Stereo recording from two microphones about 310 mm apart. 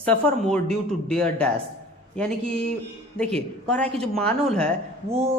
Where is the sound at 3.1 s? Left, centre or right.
Centre.